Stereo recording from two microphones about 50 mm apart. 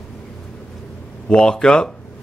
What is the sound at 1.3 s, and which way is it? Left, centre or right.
Speech, centre.